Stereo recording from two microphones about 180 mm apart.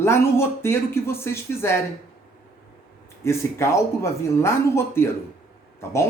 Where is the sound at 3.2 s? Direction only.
15° left (ahead or behind).